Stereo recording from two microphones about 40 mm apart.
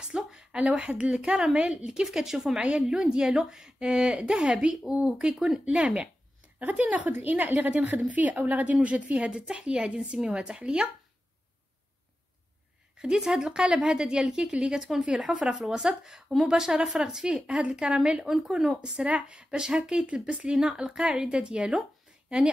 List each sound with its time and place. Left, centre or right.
0.0 s a sound: centre
0.6 s a woman's voice: right
1.1 s a woman's voice: centre
2.1 s a woman's voice: centre
6.6 s a woman's voice: right
7.1 s a woman's voice: right
12.9 s a woman's voice: centre
14.8 s a woman's voice: centre; by 20.5 s right
20.5 s a woman's voice: centre